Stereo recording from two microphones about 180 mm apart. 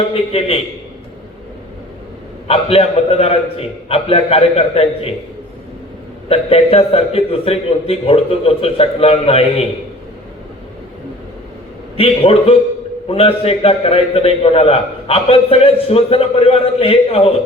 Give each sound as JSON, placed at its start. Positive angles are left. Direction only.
{"t": 0.1, "sound": "a man's voice", "side_deg": 30}
{"t": 2.5, "sound": "a man's voice", "side_deg": 30}
{"t": 6.2, "sound": "a man's voice", "side_deg": 35}
{"t": 11.9, "sound": "a man's voice", "side_deg": 35}